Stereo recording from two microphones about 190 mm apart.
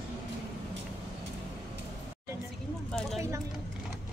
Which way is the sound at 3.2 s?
15° right (ahead or behind).